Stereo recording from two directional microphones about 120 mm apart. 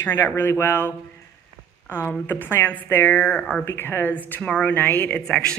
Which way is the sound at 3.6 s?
20° left (ahead or behind).